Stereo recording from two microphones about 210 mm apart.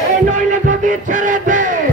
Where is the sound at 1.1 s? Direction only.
40° right (ahead or behind).